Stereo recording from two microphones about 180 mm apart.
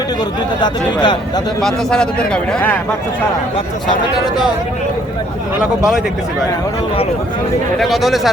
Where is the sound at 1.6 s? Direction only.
Centre (ahead or behind).